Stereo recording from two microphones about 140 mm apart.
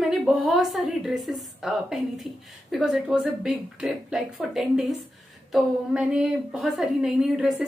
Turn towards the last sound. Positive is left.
turn(degrees=-5)  # may be behind; listen again after turning